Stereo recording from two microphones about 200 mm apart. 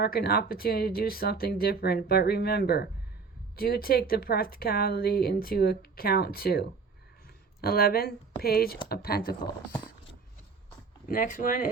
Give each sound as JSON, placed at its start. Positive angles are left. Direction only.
{"t": 0.0, "sound": "speech", "side_deg": 50}
{"t": 11.1, "sound": "speech", "side_deg": 40}